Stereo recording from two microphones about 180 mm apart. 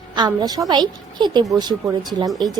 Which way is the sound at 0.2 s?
25° right (ahead or behind).